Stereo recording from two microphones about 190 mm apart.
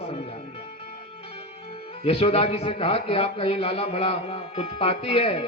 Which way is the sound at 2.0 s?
30° left (ahead or behind).